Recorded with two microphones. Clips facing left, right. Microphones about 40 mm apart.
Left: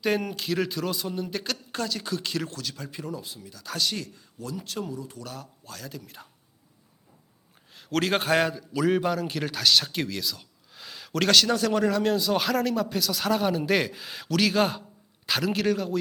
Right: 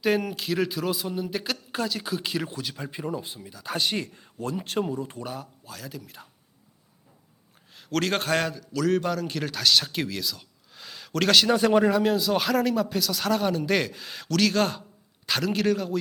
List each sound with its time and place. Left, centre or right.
0.0 s speech: centre; by 5.2 s right
5.2 s speech: centre
5.6 s speech: centre
7.7 s a man's voice: centre
11.3 s speech: centre